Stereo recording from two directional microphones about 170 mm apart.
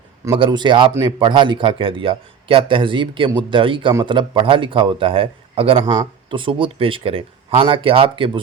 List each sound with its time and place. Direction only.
0.3 s a man's voice: 30° right (ahead or behind)